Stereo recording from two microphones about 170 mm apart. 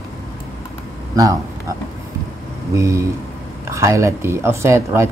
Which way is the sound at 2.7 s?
15° right (ahead or behind).